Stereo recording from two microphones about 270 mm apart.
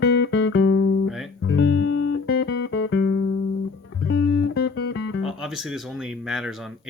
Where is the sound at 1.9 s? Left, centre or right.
Left.